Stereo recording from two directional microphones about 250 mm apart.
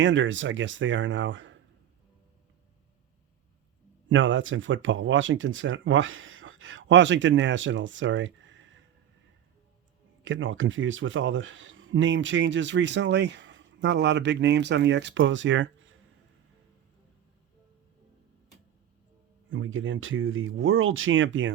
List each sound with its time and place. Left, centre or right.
0.0 s speech: right
4.1 s speech: right
10.2 s speech: right
19.5 s speech: right